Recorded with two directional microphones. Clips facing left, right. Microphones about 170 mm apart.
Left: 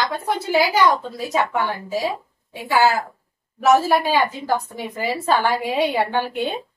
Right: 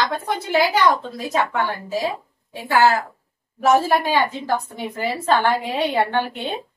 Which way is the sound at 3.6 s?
5° left (ahead or behind).